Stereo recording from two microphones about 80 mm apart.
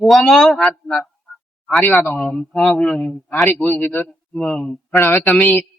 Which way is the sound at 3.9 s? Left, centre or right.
Centre.